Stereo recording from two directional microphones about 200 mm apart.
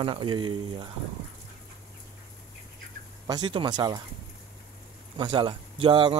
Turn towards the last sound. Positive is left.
turn(degrees=-25)  # may be behind; listen again after turning